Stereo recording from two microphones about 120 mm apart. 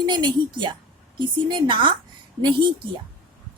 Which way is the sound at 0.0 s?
40° right (ahead or behind).